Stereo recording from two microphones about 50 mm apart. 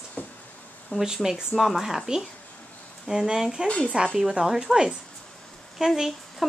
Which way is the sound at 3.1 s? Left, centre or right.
Centre.